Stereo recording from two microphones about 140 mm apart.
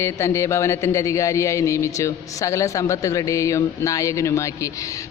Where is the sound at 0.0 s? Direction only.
20° left (ahead or behind).